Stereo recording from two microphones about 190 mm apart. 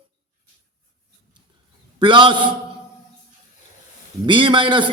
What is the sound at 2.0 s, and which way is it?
Speech, 25° right (ahead or behind).